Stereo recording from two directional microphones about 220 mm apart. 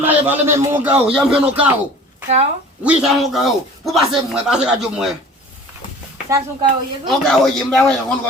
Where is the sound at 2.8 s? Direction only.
5° right (ahead or behind).